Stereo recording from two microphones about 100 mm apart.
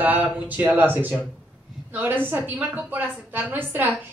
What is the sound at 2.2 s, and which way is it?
A woman's voice, 20° right (ahead or behind).